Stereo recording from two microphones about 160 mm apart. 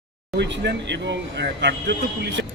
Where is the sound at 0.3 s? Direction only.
90° right.